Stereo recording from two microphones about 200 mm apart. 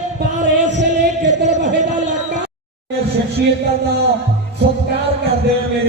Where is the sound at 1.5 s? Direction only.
35° right (ahead or behind).